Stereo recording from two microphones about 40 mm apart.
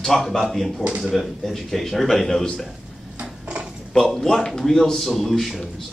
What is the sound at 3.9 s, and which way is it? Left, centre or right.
A man's voice, centre.